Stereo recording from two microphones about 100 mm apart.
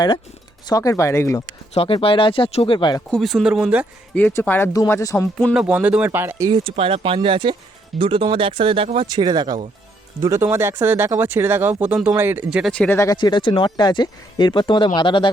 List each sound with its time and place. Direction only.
0.7 s speech: 35° left (ahead or behind)
1.7 s speech: 75° left (ahead or behind)
2.7 s speech: 50° left (ahead or behind)
3.1 s speech: centre (ahead or behind)
4.1 s speech: 20° left (ahead or behind)
5.5 s speech: 10° right (ahead or behind)
6.5 s speech: 65° right (ahead or behind)
9.0 s speech: 45° right (ahead or behind)
10.2 s speech: 30° right (ahead or behind)
12.5 s speech: 10° right (ahead or behind)
12.7 s speech: 10° left (ahead or behind)
13.1 s speech: 50° left (ahead or behind)